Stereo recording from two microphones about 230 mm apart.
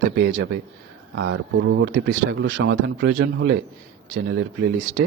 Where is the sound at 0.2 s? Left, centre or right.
Right.